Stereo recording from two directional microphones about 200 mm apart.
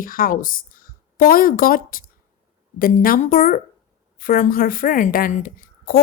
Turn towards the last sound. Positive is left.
turn(degrees=45)  # may be behind; listen again after turning